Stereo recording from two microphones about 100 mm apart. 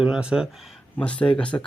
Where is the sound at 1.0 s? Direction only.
10° left (ahead or behind).